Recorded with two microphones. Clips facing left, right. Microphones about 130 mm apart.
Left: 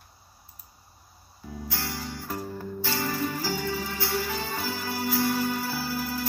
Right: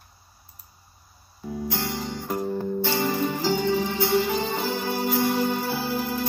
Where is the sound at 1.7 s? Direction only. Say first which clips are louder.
Right 4 dB; 20° right (ahead or behind).